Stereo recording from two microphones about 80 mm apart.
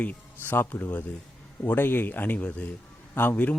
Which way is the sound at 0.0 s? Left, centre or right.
Left.